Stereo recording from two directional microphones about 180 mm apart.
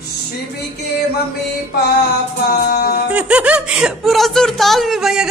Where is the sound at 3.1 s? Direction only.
10° right (ahead or behind).